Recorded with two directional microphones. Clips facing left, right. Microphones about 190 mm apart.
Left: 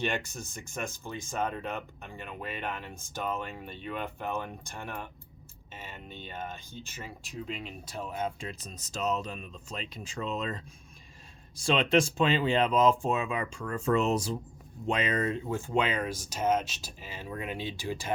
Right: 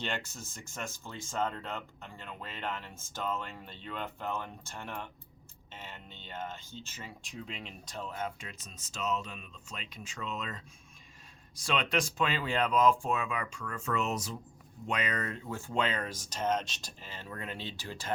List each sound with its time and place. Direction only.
0.0 s speech: 15° left (ahead or behind)
8.4 s speech: 35° left (ahead or behind); by 18.1 s 10° left (ahead or behind)